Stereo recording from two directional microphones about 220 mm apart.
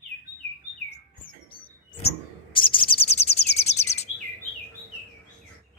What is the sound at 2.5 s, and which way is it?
Bird, 25° left (ahead or behind).